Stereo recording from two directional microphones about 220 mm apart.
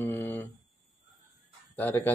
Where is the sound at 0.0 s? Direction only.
10° left (ahead or behind).